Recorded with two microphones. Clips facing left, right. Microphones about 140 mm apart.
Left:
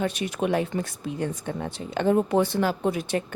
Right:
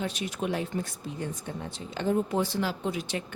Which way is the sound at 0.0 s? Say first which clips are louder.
Left 5 dB; 60° left (ahead or behind).